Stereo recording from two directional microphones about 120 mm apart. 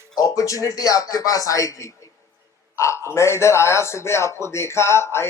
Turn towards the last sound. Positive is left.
turn(degrees=20)  # may be behind; listen again after turning